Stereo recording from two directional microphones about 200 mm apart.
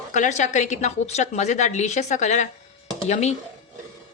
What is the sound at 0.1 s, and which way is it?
A woman's voice, 35° left (ahead or behind).